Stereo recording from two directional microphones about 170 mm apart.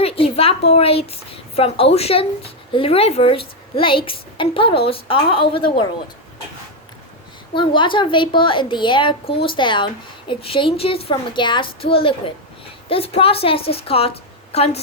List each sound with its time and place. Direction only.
0.0 s a sound: 35° left (ahead or behind)
0.7 s speech: 35° left (ahead or behind)
7.5 s a woman's voice: 30° left (ahead or behind)